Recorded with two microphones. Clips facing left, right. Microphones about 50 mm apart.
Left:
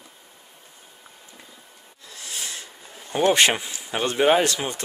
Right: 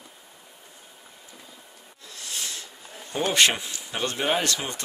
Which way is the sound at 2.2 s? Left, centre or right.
Centre.